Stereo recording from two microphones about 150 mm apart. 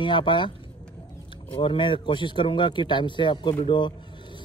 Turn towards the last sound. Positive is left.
turn(degrees=30)  # may be behind; listen again after turning